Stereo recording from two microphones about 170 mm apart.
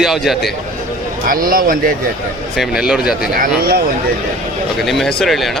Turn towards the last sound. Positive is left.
turn(degrees=0)  # may be behind; listen again after turning